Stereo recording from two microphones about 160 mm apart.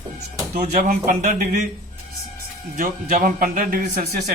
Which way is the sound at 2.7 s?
60° right (ahead or behind).